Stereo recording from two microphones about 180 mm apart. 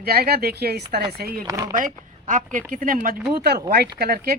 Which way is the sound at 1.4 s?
20° right (ahead or behind).